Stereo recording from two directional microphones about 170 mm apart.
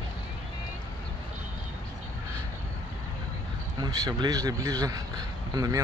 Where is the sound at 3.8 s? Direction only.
25° right (ahead or behind).